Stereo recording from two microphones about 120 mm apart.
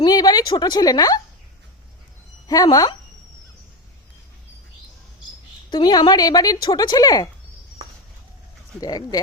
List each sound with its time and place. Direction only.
0.0 s a woman's voice: 30° left (ahead or behind)
2.5 s speech: 30° left (ahead or behind)
5.7 s a woman's voice: 35° left (ahead or behind)
8.8 s a woman's voice: 35° left (ahead or behind)